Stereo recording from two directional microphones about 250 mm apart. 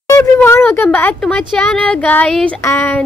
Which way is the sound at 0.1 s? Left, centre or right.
Centre.